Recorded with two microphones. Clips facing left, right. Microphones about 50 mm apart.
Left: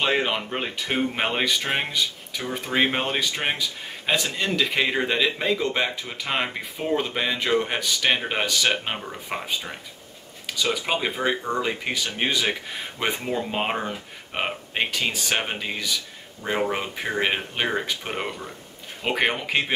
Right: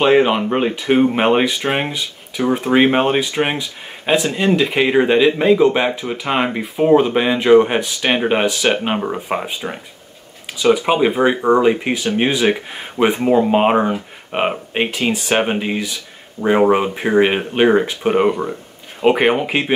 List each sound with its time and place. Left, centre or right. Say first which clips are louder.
0.0 s speech: right 10 dB; centre
16.4 s speech: right 12 dB; right
16.7 s speech: right 12 dB; centre
18.3 s a sound: right 13 dB; right
19.0 s speech: right 10 dB; centre